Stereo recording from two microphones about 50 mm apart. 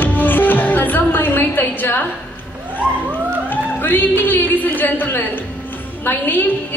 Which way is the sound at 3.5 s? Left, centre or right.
Left.